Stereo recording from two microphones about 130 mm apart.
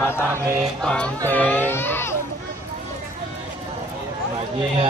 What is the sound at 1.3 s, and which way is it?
Speech, 15° left (ahead or behind).